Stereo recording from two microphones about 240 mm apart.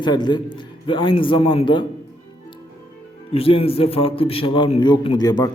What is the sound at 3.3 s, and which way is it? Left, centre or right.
A man's voice, left.